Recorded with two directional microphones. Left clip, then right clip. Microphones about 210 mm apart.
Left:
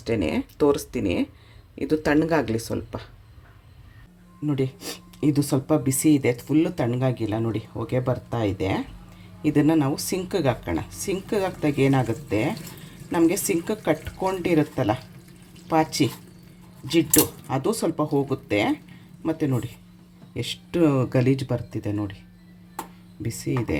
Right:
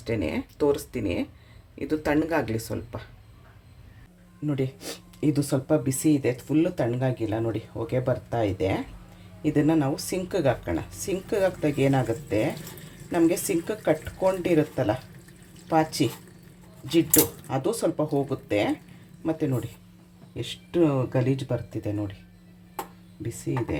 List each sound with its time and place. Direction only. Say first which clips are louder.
0.0 s speech: left 4 dB; 20° left (ahead or behind)
4.4 s speech: left 3 dB; 10° left (ahead or behind)
20.4 s speech: left 2 dB; 30° left (ahead or behind); by 22.1 s 10° left (ahead or behind)